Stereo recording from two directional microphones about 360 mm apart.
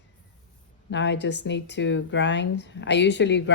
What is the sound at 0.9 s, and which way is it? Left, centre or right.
Speech, left.